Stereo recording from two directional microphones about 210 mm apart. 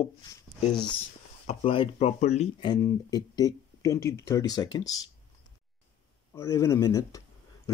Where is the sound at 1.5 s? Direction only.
30° left (ahead or behind).